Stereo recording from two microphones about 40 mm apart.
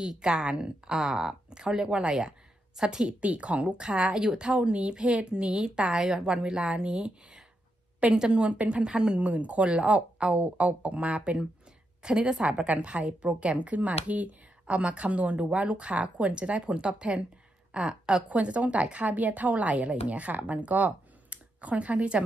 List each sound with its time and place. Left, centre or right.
0.0 s a woman's voice: centre
3.2 s a woman's voice: right
4.6 s a woman's voice: right
8.3 s a woman's voice: right
9.3 s a woman's voice: right
18.2 s a woman's voice: right